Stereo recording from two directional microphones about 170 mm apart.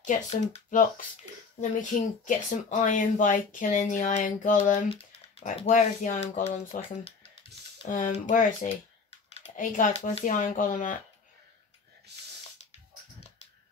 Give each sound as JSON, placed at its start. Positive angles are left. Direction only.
{"t": 0.0, "sound": "speech", "side_deg": 45}
{"t": 12.1, "sound": "gasp", "side_deg": -80}